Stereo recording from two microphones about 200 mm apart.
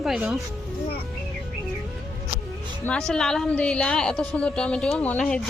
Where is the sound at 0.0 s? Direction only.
5° right (ahead or behind).